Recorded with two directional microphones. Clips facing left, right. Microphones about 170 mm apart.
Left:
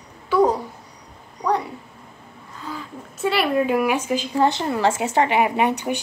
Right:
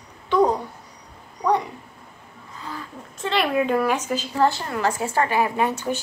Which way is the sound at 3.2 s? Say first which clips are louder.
Left 2 dB; 5° left (ahead or behind).